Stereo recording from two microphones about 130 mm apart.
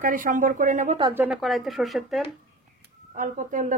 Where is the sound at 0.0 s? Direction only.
90° right; by 0.9 s 75° right (ahead or behind).